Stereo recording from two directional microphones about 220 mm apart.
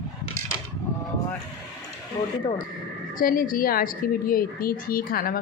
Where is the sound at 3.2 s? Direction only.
40° left (ahead or behind).